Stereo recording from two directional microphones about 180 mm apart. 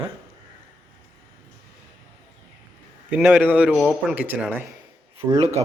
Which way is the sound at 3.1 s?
10° right (ahead or behind).